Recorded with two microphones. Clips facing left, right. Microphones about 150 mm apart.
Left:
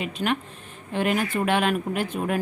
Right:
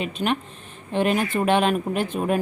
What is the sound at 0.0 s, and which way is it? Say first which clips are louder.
Speech: right 2 dB; 25° right (ahead or behind).